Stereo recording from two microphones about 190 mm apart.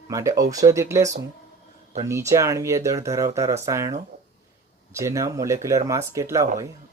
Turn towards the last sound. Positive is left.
turn(degrees=-15)  # may be behind; listen again after turning